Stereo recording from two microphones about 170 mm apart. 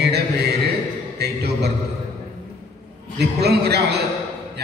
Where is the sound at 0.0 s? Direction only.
75° right (ahead or behind).